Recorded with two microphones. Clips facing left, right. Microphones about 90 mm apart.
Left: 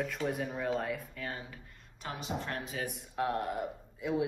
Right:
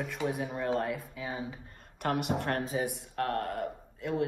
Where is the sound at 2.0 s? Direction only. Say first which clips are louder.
Right 8 dB; 60° right (ahead or behind).